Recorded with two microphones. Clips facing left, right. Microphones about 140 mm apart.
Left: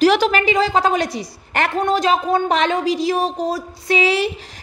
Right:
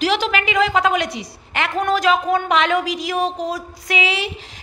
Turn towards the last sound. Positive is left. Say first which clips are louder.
# left 6 dB
turn(degrees=45)  # may be behind; listen again after turning